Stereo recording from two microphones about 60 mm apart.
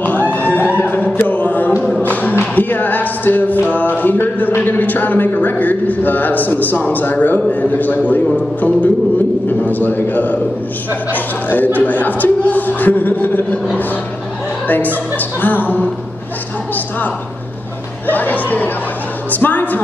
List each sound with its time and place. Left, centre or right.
0.0 s a sound: left
2.0 s music: left
3.7 s a man's voice: left
11.5 s a man's voice: left
15.1 s a man's voice: left
18.0 s a man's voice: left